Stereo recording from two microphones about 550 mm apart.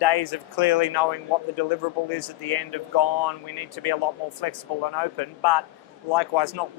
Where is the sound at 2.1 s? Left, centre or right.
Left.